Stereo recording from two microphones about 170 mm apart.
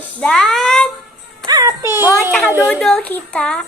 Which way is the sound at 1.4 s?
20° right (ahead or behind).